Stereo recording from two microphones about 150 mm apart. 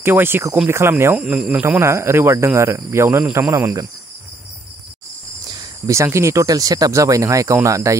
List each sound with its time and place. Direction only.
0.0 s speech: 15° right (ahead or behind)
1.1 s speech: 5° right (ahead or behind)
5.5 s speech: 20° right (ahead or behind)